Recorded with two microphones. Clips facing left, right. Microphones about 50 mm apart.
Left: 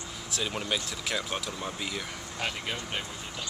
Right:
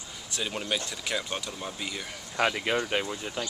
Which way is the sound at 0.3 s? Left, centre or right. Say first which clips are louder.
Even; centre.